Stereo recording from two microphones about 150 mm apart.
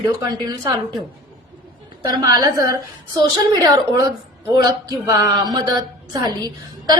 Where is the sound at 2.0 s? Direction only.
25° right (ahead or behind).